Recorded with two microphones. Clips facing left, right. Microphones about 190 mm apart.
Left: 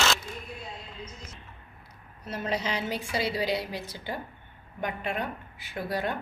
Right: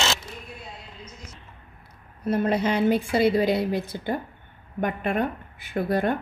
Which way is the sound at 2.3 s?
55° right (ahead or behind).